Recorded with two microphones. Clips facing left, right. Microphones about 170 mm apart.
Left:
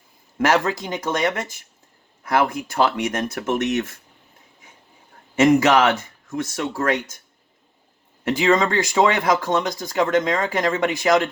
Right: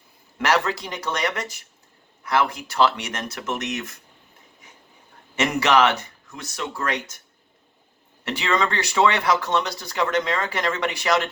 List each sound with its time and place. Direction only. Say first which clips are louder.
0.3 s speech: left 3 dB; 45° left (ahead or behind)
5.4 s speech: left 4 dB; 50° left (ahead or behind)
8.2 s speech: left 6 dB; 45° left (ahead or behind)